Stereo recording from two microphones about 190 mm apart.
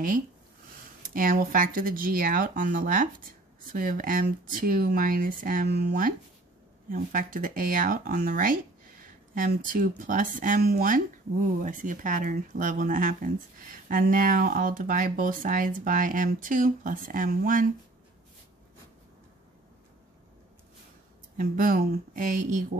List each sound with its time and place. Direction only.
1.0 s speech: 45° right (ahead or behind)
21.4 s speech: 45° right (ahead or behind)